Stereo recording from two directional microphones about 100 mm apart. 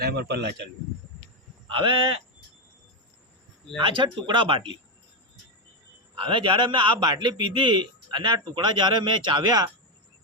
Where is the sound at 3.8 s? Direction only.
55° right (ahead or behind).